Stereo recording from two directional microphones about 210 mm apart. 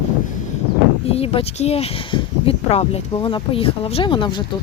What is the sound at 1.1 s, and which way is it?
Speech, 25° left (ahead or behind).